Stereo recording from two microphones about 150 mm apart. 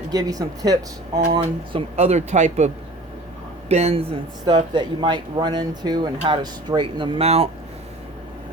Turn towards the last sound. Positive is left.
turn(degrees=-40)  # may be behind; listen again after turning